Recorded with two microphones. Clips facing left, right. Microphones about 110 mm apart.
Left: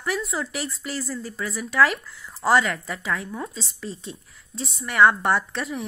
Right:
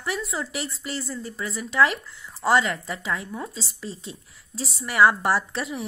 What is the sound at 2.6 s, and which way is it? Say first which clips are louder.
Speech: left 1 dB; 30° right (ahead or behind).